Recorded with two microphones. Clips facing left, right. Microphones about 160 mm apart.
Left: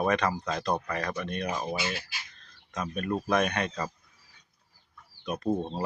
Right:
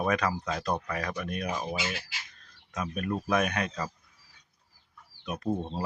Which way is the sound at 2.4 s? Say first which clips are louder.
Even; 5° right (ahead or behind).